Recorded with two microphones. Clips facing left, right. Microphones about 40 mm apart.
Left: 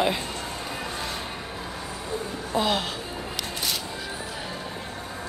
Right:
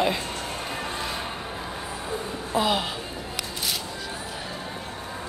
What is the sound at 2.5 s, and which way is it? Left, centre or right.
Speech, centre.